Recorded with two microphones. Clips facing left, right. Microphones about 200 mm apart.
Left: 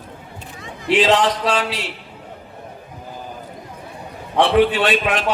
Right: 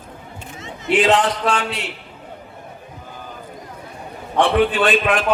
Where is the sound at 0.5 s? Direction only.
20° right (ahead or behind).